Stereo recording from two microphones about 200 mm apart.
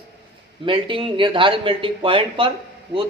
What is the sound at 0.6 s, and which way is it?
Speech, 25° right (ahead or behind).